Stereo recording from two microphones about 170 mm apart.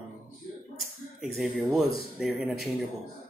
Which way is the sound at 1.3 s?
Centre (ahead or behind).